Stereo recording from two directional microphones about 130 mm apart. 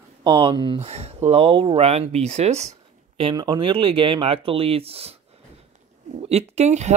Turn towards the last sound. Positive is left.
turn(degrees=-60)  # may be behind; listen again after turning